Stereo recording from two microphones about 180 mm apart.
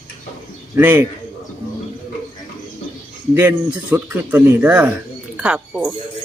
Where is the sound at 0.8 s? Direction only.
15° right (ahead or behind).